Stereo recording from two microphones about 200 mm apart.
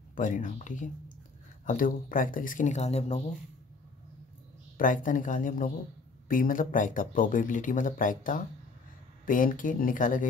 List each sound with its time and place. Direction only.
0.1 s speech: 40° left (ahead or behind)
4.7 s speech: 40° left (ahead or behind)